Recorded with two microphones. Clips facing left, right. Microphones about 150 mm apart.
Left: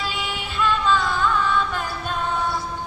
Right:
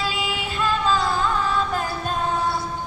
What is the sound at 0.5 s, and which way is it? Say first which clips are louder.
Music: left 1 dB; 35° right (ahead or behind).